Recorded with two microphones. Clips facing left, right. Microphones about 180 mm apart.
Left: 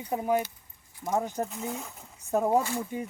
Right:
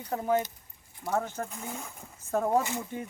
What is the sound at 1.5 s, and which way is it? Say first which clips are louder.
Speech: left 4 dB; centre (ahead or behind).